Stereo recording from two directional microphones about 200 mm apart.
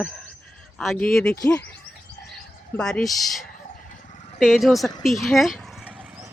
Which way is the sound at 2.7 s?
5° left (ahead or behind).